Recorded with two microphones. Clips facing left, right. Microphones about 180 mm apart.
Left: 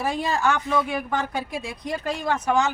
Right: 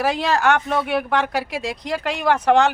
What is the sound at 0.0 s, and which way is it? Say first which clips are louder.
Speech: right 4 dB; 90° right.